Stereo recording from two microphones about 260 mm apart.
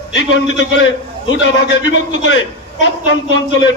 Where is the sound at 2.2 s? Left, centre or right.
Left.